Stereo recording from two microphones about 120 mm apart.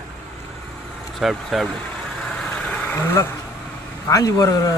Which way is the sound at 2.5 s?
10° left (ahead or behind).